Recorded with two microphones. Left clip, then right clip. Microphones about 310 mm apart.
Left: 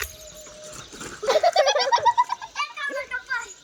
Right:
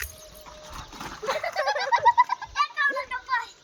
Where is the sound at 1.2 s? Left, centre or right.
Left.